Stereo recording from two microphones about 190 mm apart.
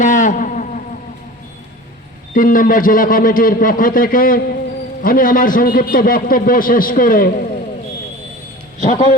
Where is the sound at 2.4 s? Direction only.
45° left (ahead or behind).